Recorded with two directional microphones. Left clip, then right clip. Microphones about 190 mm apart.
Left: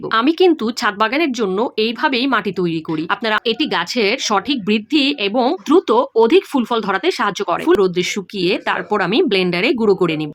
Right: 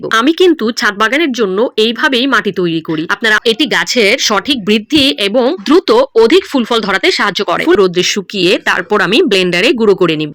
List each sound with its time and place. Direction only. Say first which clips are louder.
0.1 s speech: right 5 dB; 15° right (ahead or behind)